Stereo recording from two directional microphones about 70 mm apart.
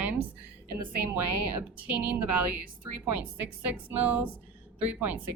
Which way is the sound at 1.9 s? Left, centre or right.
Right.